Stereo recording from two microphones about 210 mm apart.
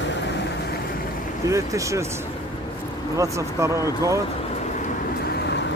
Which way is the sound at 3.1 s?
15° right (ahead or behind).